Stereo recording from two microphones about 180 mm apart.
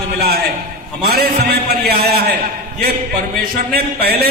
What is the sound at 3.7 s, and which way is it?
Speech, 60° right (ahead or behind).